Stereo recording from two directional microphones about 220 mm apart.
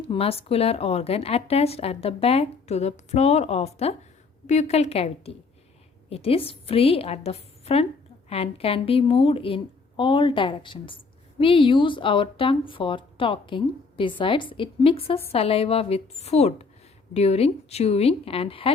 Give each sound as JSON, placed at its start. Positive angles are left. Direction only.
{"t": 0.1, "sound": "speech", "side_deg": 25}